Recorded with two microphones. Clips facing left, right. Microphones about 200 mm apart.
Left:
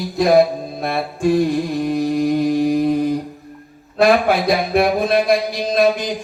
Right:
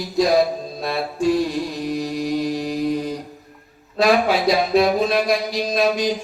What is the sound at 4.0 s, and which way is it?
A man's voice, 55° left (ahead or behind).